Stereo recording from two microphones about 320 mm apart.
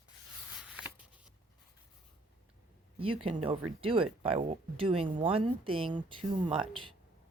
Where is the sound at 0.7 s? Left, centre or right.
Centre.